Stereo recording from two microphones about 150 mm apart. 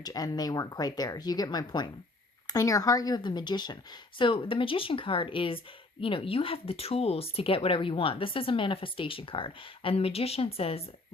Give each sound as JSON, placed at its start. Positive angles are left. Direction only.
{"t": 0.0, "sound": "speech", "side_deg": 25}